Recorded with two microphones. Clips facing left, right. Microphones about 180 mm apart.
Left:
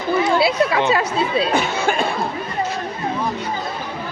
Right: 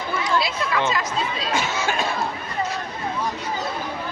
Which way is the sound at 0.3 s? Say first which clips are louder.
Left 7 dB; 60° left (ahead or behind).